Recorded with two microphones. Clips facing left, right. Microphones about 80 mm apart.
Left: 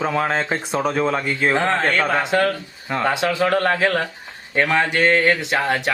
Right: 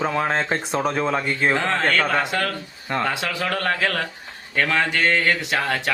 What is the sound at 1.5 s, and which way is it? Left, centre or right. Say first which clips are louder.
Speech: left 2 dB; centre.